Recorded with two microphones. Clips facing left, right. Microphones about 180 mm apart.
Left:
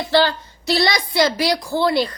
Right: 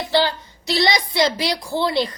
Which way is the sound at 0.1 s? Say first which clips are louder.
Left 3 dB; 15° right (ahead or behind).